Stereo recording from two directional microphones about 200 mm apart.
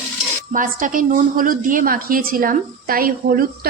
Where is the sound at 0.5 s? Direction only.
40° right (ahead or behind).